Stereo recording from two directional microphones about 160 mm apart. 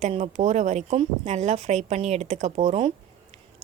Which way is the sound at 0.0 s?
45° right (ahead or behind).